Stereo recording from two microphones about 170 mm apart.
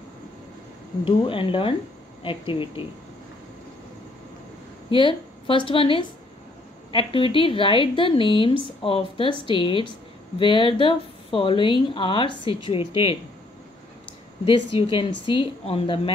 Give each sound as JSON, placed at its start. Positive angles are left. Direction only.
{"t": 1.0, "sound": "speech", "side_deg": 30}
{"t": 4.9, "sound": "speech", "side_deg": 30}
{"t": 14.4, "sound": "speech", "side_deg": 30}